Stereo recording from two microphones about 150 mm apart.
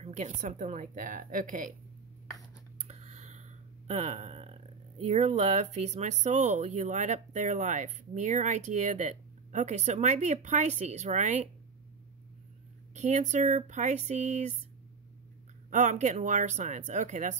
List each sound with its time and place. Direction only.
0.0 s a woman's voice: 50° right (ahead or behind)
2.9 s a sound: 45° right (ahead or behind)
5.0 s speech: 45° right (ahead or behind)
12.9 s speech: 50° right (ahead or behind)
15.7 s speech: 55° right (ahead or behind)